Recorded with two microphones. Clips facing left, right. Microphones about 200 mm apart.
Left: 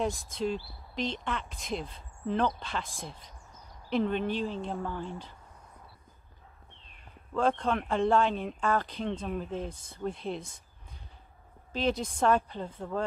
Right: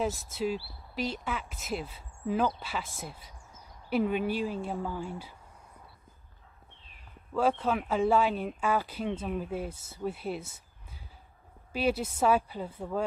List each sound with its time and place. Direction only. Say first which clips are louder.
0.0 s speech: even; 5° right (ahead or behind)
7.3 s speech: even; 5° right (ahead or behind)
11.7 s speech: right 1 dB; 10° right (ahead or behind)